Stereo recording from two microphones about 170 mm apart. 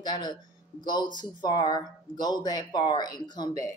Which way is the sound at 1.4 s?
25° left (ahead or behind).